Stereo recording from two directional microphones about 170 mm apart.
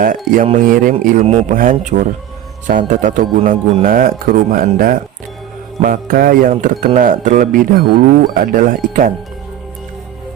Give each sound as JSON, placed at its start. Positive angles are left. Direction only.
{"t": 0.0, "sound": "speech", "side_deg": -55}
{"t": 1.2, "sound": "a man's voice", "side_deg": -40}
{"t": 1.5, "sound": "speech", "side_deg": -50}